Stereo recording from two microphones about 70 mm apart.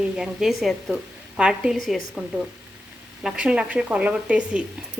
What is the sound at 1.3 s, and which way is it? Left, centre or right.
Speech, centre.